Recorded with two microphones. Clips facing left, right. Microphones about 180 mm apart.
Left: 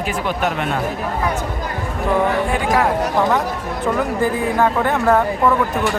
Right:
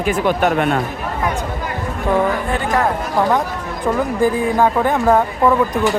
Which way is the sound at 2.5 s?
10° left (ahead or behind).